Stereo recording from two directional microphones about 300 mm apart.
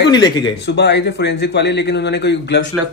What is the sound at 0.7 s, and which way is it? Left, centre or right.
A man's voice, left.